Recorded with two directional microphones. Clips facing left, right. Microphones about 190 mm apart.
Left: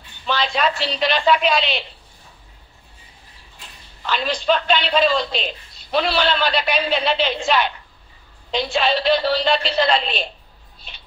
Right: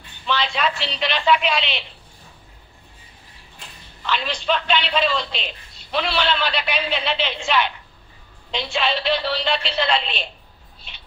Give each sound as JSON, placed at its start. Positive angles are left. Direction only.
{"t": 0.3, "sound": "a man's voice", "side_deg": 40}
{"t": 4.0, "sound": "a man's voice", "side_deg": 40}